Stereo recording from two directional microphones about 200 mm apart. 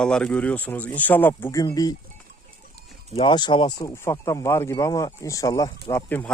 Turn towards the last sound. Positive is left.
turn(degrees=10)  # may be behind; listen again after turning